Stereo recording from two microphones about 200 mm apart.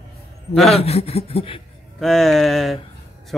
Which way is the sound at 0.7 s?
30° left (ahead or behind).